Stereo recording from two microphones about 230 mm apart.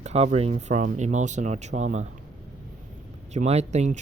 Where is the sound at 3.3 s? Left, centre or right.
Right.